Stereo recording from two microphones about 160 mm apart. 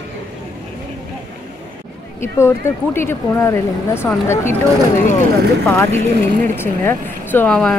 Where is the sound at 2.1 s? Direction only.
15° left (ahead or behind).